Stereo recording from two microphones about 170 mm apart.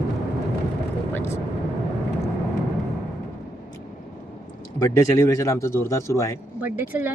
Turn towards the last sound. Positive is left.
turn(degrees=-10)  # may be behind; listen again after turning